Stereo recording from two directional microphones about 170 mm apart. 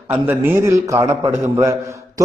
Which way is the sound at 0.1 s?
10° right (ahead or behind).